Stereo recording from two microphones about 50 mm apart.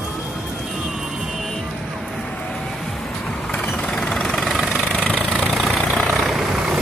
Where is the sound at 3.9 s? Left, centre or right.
Centre.